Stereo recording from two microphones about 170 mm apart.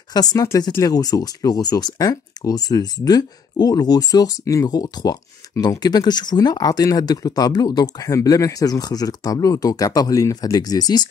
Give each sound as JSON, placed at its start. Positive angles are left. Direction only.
{"t": 0.1, "sound": "speech", "side_deg": 20}